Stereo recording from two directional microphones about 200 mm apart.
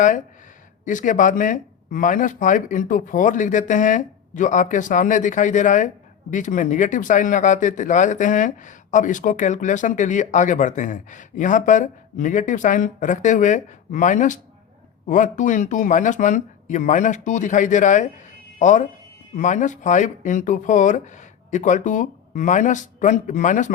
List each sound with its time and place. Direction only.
0.9 s speech: 40° left (ahead or behind)